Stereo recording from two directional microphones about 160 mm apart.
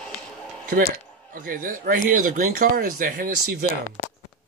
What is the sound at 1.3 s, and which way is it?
Speech, 60° right (ahead or behind).